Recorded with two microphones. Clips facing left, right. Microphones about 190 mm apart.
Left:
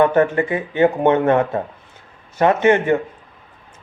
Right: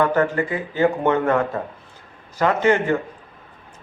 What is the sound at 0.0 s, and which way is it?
A man's voice, 25° left (ahead or behind).